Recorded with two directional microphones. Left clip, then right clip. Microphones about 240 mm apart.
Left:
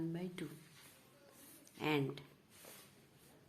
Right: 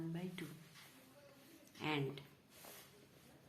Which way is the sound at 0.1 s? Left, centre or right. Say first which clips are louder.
Left 3 dB; left.